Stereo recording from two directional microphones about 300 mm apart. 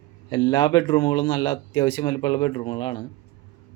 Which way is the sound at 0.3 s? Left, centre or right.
Centre.